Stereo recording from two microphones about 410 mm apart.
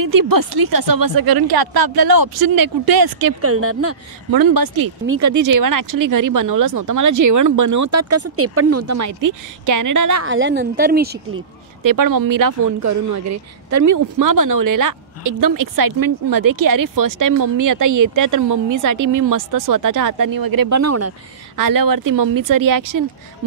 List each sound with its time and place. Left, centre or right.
0.0 s speech: right
3.3 s speech: right
4.3 s speech: right
5.0 s speech: right
10.2 s a woman's voice: right
11.8 s speech: right
21.5 s speech: right